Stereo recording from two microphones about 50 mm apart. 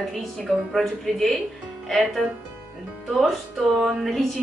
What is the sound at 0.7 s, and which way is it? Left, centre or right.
A woman's voice, centre.